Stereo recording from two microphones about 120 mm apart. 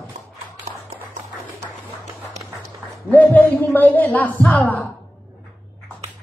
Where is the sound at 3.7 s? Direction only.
15° left (ahead or behind).